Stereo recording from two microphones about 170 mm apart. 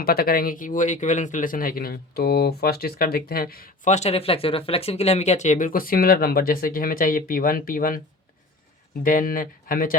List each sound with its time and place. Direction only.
0.0 s speech: 65° left (ahead or behind)
3.8 s speech: 40° left (ahead or behind); by 8.0 s 55° left (ahead or behind)
9.0 s speech: 55° left (ahead or behind)